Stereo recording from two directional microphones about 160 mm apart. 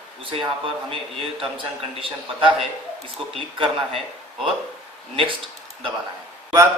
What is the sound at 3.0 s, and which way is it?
Speech, 35° right (ahead or behind).